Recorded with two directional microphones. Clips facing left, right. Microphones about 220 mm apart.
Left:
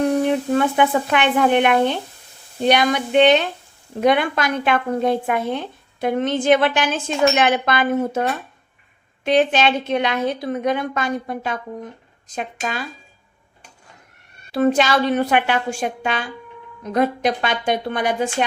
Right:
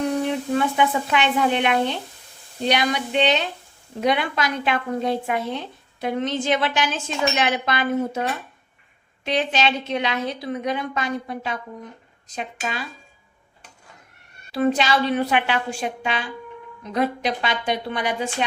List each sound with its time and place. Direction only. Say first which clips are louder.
0.5 s speech: left 1 dB; 55° left (ahead or behind)
14.5 s speech: left 3 dB; 50° left (ahead or behind)